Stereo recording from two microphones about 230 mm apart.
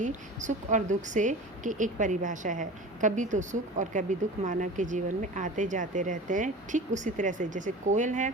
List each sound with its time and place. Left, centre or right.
0.0 s a woman's voice: right